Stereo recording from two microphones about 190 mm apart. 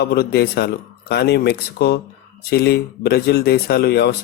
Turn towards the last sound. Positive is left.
turn(degrees=60)  # may be behind; listen again after turning